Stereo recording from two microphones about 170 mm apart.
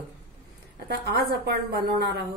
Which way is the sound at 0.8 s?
75° right (ahead or behind).